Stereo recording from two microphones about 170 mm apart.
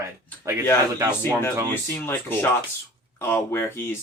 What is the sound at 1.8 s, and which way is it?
Speech, 15° left (ahead or behind).